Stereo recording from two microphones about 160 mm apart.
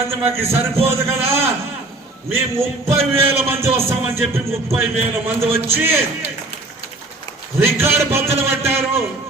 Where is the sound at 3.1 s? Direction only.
15° right (ahead or behind).